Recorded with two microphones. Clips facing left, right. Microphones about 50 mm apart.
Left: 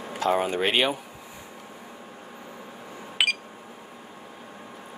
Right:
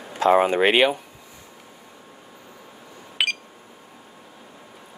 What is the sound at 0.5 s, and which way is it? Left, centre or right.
Speech, right.